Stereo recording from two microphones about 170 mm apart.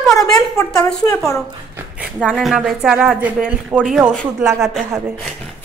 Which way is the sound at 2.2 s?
Centre (ahead or behind).